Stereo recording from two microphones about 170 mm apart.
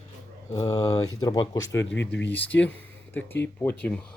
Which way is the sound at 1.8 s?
90° left.